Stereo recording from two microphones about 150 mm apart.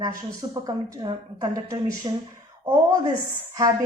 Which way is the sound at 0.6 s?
25° right (ahead or behind).